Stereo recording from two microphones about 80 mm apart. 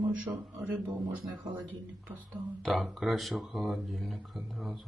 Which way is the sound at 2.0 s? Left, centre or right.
Centre.